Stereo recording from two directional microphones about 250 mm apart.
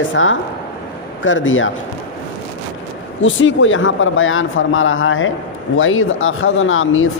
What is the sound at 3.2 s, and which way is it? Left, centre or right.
Speech, left.